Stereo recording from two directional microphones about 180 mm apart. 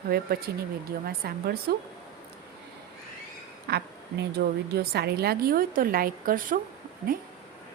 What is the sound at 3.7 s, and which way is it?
A woman's voice, 60° right (ahead or behind).